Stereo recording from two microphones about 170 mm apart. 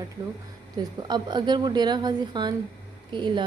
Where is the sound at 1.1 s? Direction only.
25° right (ahead or behind).